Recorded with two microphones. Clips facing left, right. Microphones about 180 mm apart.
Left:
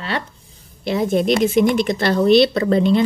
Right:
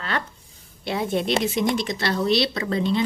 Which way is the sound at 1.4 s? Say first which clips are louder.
Left 7 dB; 55° left (ahead or behind).